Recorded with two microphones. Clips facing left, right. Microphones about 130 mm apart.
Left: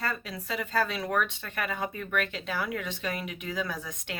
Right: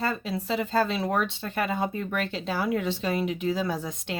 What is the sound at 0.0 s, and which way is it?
Speech, 25° right (ahead or behind).